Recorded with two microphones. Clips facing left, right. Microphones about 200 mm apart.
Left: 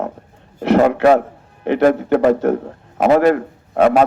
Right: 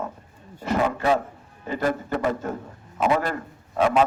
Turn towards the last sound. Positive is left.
turn(degrees=70)  # may be behind; listen again after turning